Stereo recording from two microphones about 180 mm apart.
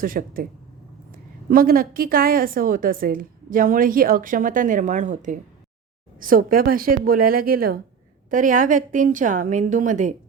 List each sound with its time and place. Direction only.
0.0 s a woman's voice: 50° right (ahead or behind)